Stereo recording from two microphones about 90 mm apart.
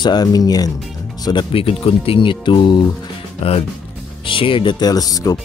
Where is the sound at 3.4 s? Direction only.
90° left.